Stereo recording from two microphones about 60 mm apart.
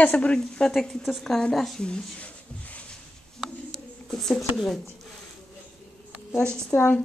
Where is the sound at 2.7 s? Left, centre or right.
Left.